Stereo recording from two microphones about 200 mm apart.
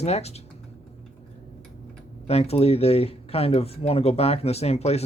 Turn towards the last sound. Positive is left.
turn(degrees=30)  # may be behind; listen again after turning